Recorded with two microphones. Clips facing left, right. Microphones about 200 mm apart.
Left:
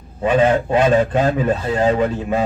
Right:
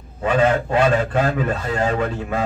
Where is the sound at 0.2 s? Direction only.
20° left (ahead or behind).